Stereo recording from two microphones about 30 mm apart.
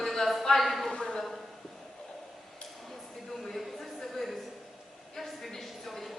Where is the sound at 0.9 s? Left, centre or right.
Left.